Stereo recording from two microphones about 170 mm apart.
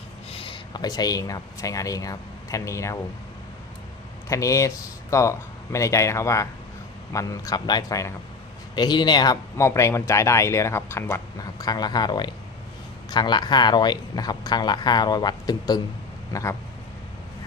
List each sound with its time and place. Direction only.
0.3 s speech: 30° left (ahead or behind)
4.3 s speech: 20° left (ahead or behind)